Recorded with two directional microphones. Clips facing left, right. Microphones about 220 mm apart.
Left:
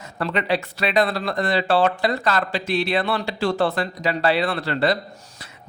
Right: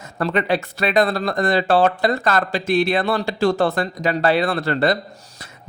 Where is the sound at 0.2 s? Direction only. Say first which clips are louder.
Right 3 dB; 45° right (ahead or behind).